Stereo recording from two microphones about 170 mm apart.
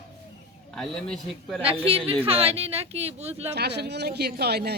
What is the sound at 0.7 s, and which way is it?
Speech, 5° left (ahead or behind).